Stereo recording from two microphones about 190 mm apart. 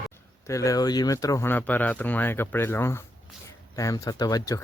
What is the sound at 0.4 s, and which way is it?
Speech, 15° left (ahead or behind).